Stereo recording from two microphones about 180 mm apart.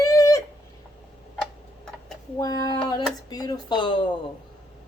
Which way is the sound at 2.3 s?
20° left (ahead or behind).